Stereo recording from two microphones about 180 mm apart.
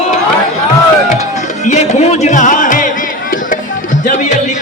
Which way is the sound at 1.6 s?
40° left (ahead or behind).